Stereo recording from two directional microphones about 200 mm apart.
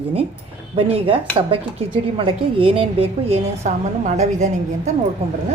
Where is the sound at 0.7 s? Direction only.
30° right (ahead or behind).